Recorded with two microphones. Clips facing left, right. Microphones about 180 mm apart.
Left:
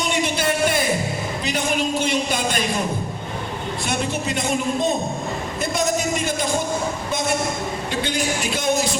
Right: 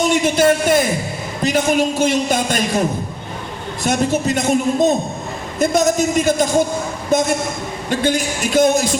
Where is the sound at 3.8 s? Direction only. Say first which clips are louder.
Right 9 dB; 45° right (ahead or behind).